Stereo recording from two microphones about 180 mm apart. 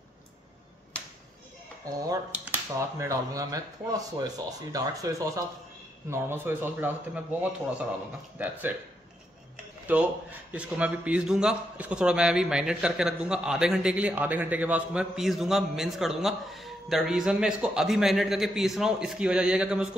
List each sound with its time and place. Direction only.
1.9 s speech: 20° right (ahead or behind)
9.9 s a man's voice: 10° right (ahead or behind)